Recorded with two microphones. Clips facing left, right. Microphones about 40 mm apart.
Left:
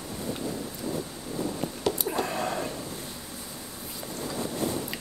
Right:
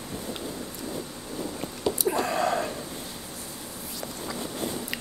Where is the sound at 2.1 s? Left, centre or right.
Right.